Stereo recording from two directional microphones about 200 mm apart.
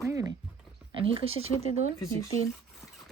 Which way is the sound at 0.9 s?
25° right (ahead or behind).